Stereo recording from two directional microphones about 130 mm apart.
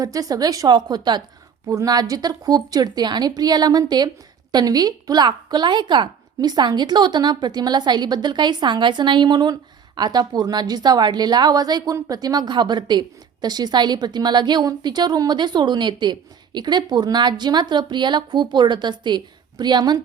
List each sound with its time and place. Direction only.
0.0 s a woman's voice: 30° right (ahead or behind)